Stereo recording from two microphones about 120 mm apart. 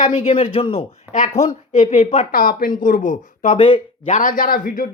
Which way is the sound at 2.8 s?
90° left.